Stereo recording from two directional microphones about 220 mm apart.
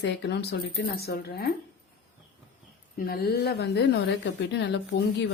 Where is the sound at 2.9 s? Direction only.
45° left (ahead or behind).